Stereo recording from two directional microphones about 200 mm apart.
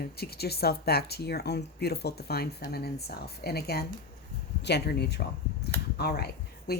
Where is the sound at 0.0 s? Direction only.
50° left (ahead or behind).